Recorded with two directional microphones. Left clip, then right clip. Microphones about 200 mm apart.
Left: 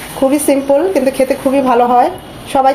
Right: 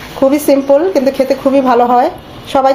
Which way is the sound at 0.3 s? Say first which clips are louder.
Right 3 dB; 15° right (ahead or behind).